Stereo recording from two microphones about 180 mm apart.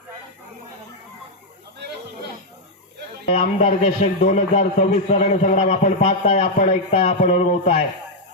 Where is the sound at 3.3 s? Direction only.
40° left (ahead or behind).